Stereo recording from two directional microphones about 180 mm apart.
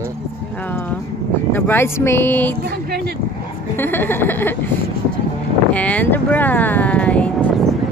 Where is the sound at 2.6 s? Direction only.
60° right (ahead or behind).